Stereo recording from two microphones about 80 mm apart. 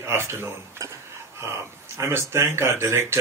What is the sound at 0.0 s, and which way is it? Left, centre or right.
Speech, right.